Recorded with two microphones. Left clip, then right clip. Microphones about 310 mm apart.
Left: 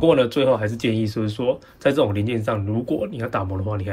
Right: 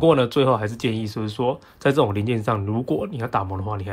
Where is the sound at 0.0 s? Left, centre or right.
Centre.